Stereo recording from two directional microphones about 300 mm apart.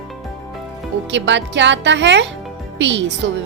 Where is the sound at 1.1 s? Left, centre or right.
Right.